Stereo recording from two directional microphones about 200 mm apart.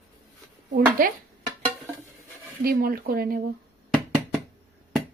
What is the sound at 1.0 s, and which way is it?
Speech, 45° right (ahead or behind).